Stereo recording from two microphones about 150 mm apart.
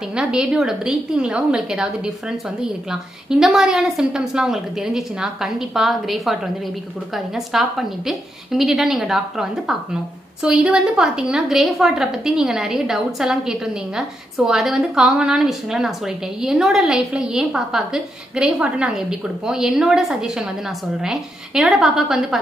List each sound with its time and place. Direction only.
0.1 s a woman's voice: 5° right (ahead or behind)